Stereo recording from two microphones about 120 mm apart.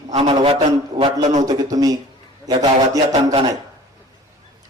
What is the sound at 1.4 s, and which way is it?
A man's voice, 30° right (ahead or behind).